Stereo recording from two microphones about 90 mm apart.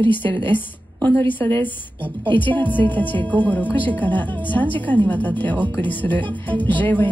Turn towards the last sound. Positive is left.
turn(degrees=20)  # may be behind; listen again after turning